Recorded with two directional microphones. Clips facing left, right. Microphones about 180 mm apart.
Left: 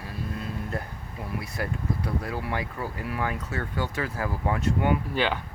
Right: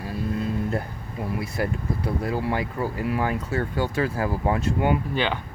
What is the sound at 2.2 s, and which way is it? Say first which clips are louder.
Speech: right 5 dB; 30° right (ahead or behind).